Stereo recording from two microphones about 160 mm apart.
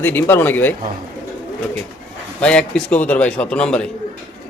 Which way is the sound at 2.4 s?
5° left (ahead or behind).